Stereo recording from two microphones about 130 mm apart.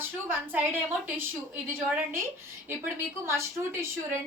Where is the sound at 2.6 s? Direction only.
20° right (ahead or behind).